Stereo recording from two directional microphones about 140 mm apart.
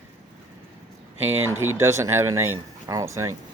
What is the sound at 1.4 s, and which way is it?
Speech, 15° right (ahead or behind).